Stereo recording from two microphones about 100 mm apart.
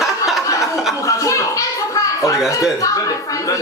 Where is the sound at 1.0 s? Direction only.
30° left (ahead or behind).